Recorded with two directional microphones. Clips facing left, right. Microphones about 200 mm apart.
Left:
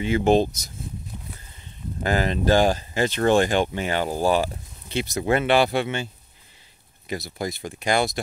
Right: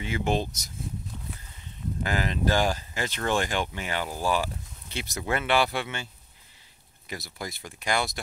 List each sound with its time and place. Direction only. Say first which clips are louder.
0.0 s speech: left 9 dB; 30° left (ahead or behind)
2.0 s speech: left 6 dB; 35° left (ahead or behind)
7.1 s speech: left 8 dB; 20° left (ahead or behind)